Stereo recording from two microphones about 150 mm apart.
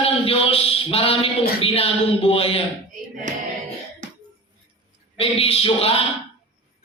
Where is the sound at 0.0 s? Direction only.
40° left (ahead or behind).